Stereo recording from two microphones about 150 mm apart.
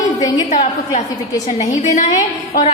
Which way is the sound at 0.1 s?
25° left (ahead or behind).